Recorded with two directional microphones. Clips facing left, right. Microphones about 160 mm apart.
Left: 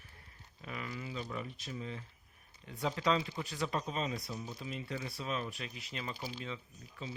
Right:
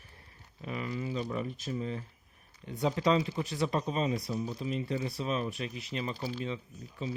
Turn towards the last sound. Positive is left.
turn(degrees=-20)  # may be behind; listen again after turning